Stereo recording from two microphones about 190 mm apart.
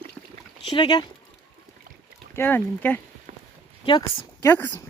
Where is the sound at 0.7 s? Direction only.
20° left (ahead or behind).